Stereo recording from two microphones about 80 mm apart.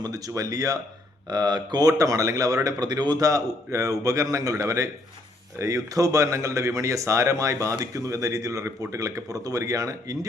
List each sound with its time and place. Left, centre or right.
0.0 s speech: right
1.3 s speech: right